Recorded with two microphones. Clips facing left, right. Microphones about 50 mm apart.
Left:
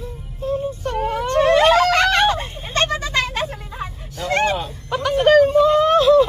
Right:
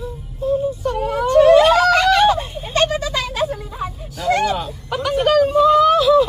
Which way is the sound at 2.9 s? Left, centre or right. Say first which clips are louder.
Even; left.